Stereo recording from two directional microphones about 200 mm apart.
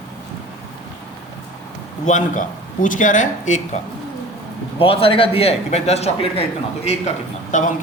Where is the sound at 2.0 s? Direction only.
40° left (ahead or behind).